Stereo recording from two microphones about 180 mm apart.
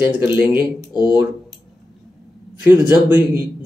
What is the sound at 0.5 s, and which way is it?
Speech, 25° left (ahead or behind).